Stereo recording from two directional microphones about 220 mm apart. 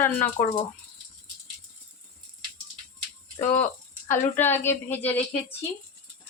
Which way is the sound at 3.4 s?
10° left (ahead or behind).